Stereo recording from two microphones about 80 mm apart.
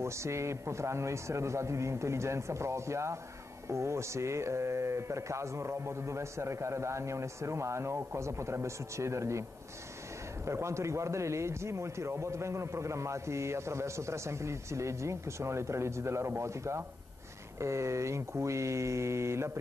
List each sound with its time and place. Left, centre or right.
0.0 s a man's voice: right
10.4 s a man's voice: right